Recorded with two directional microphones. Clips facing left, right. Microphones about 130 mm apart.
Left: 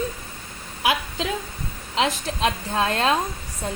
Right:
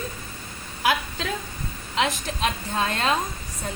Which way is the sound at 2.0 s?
35° left (ahead or behind).